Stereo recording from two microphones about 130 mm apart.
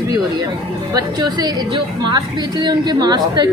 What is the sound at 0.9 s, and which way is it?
A woman's voice, 30° right (ahead or behind).